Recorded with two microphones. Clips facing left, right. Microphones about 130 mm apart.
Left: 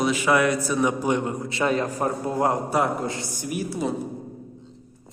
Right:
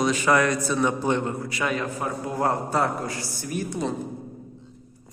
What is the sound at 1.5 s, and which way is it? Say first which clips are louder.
Speech: left 7 dB; 30° left (ahead or behind).